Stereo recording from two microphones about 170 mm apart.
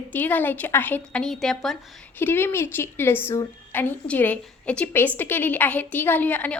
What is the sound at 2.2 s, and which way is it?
A woman's voice, 15° left (ahead or behind).